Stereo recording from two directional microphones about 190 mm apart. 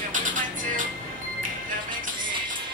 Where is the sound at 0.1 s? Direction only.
45° right (ahead or behind).